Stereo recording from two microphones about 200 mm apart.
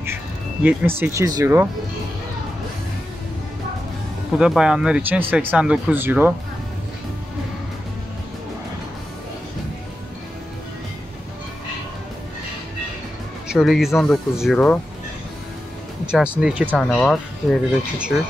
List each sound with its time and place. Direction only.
0.7 s speech: 10° right (ahead or behind)
4.4 s speech: 5° right (ahead or behind)
13.5 s speech: centre (ahead or behind)
16.3 s speech: 5° right (ahead or behind)